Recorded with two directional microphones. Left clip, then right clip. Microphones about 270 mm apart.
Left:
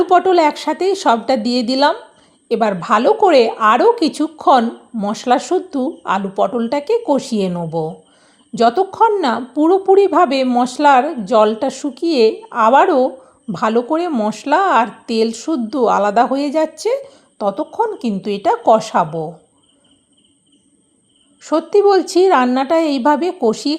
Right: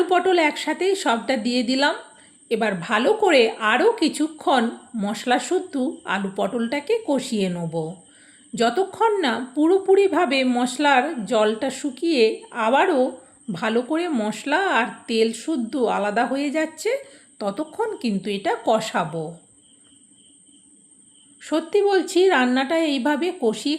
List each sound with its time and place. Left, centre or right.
0.0 s a woman's voice: left
21.4 s a woman's voice: centre